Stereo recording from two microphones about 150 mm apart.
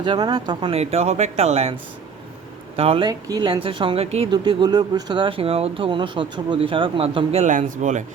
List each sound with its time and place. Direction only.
0.0 s speech: 30° right (ahead or behind)
2.7 s speech: 40° right (ahead or behind)
3.1 s speech: 25° right (ahead or behind); by 4.3 s 40° right (ahead or behind)
4.3 s speech: 30° right (ahead or behind); by 8.0 s 55° right (ahead or behind)